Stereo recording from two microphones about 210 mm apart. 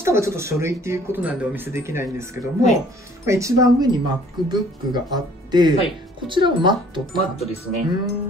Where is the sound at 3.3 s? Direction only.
15° right (ahead or behind).